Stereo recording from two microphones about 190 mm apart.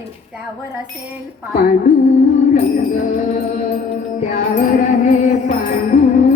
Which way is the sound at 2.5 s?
40° left (ahead or behind).